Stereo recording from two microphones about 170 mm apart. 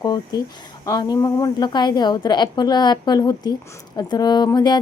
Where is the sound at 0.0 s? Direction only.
20° left (ahead or behind).